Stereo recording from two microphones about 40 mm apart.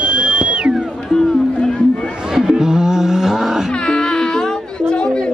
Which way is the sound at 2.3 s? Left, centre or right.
Centre.